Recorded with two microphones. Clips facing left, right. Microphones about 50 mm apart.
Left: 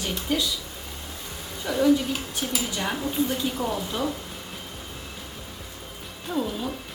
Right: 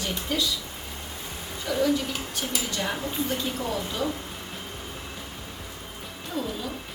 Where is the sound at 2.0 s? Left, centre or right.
Centre.